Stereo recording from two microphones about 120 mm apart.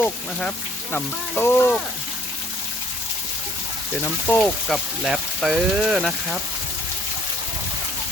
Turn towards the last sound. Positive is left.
turn(degrees=0)  # may be behind; listen again after turning